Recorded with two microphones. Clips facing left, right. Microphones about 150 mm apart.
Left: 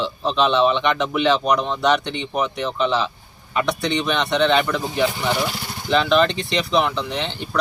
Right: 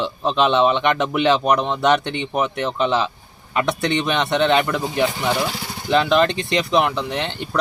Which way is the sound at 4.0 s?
20° right (ahead or behind).